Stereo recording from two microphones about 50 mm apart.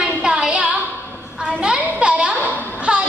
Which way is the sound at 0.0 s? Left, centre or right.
Centre.